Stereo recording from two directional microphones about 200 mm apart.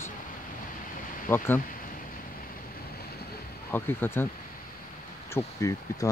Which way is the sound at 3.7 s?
10° left (ahead or behind).